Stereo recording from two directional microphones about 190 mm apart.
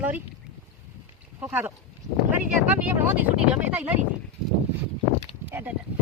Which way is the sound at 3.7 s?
10° right (ahead or behind).